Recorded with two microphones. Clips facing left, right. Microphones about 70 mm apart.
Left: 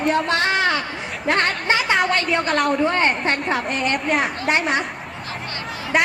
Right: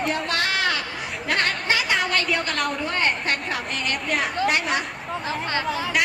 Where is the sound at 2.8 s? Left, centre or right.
Left.